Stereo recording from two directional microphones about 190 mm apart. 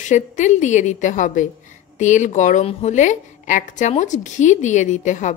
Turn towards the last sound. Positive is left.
turn(degrees=40)  # may be behind; listen again after turning